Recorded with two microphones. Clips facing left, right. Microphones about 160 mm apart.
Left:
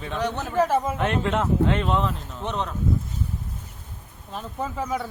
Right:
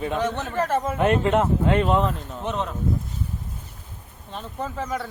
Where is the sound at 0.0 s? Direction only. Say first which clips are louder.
Right 2 dB; centre (ahead or behind).